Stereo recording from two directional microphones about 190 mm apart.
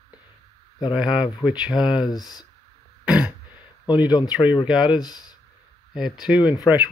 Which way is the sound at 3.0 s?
5° right (ahead or behind).